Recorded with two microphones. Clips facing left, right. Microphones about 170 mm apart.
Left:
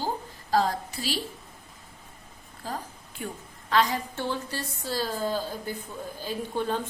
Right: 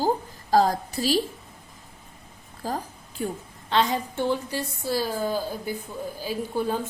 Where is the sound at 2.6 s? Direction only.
40° right (ahead or behind).